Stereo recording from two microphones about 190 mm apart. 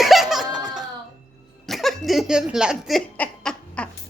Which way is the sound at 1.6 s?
Centre (ahead or behind).